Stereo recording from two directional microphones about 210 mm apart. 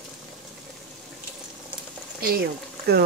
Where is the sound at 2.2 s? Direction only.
45° right (ahead or behind).